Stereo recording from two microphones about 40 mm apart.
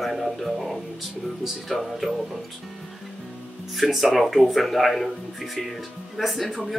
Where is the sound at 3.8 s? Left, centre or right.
Centre.